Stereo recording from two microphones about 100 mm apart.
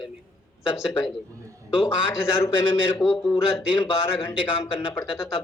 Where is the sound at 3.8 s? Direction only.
25° left (ahead or behind).